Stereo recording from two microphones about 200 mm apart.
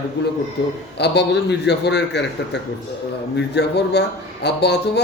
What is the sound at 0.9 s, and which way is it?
A man's voice, 55° left (ahead or behind).